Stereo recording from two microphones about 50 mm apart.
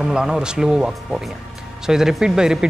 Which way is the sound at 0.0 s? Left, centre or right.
Centre.